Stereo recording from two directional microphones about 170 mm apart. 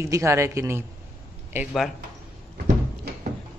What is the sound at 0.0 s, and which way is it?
Speech, 15° right (ahead or behind).